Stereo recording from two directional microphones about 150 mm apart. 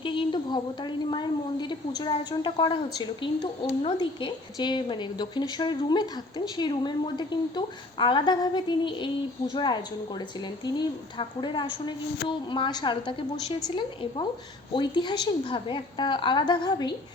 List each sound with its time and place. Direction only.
0.0 s speech: 35° left (ahead or behind)
10.8 s speech: 30° left (ahead or behind)